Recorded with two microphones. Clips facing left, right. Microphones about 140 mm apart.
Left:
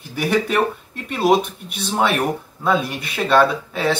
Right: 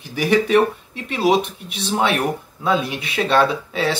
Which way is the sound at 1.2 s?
45° left (ahead or behind).